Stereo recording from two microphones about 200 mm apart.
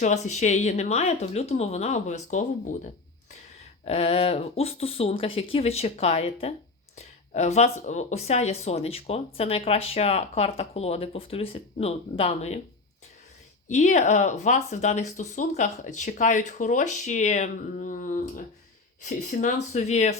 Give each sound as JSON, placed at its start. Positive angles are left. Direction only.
{"t": 0.0, "sound": "speech", "side_deg": 35}
{"t": 13.7, "sound": "speech", "side_deg": 35}